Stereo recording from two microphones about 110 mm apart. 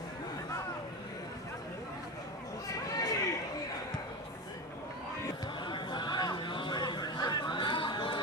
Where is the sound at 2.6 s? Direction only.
30° left (ahead or behind).